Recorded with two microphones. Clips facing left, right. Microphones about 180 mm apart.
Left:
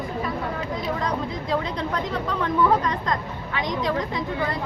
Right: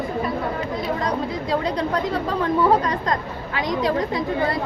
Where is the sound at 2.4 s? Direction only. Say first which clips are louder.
Right 2 dB; 35° right (ahead or behind).